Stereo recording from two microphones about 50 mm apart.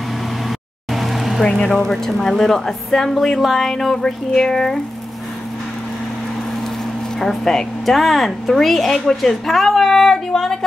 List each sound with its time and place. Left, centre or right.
0.9 s vehicle: centre
1.4 s a woman's voice: centre
7.2 s a woman's voice: centre